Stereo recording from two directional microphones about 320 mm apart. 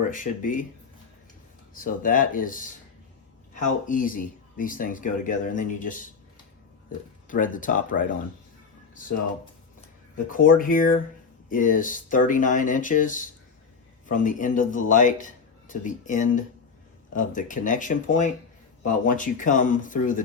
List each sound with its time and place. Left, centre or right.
0.1 s speech: left
1.7 s speech: left
7.3 s speech: left
10.2 s speech: left